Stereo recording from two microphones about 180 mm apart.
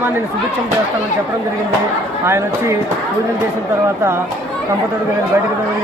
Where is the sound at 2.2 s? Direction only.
15° right (ahead or behind).